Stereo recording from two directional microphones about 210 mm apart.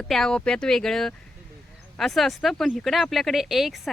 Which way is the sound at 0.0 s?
5° left (ahead or behind).